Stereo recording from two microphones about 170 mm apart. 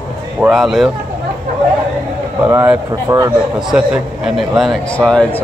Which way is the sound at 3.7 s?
5° right (ahead or behind).